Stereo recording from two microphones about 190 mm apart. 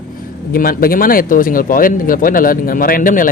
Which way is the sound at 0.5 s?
50° left (ahead or behind).